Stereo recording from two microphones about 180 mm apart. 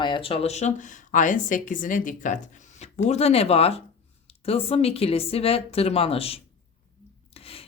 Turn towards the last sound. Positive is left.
turn(degrees=30)  # may be behind; listen again after turning